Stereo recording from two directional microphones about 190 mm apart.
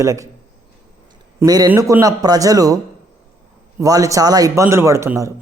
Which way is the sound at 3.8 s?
15° right (ahead or behind).